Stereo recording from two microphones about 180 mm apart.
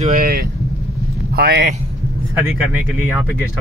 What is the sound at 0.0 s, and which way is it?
Speech, 50° right (ahead or behind).